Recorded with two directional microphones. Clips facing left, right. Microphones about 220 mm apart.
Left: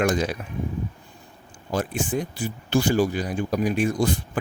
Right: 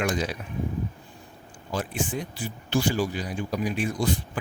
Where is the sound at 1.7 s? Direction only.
45° left (ahead or behind).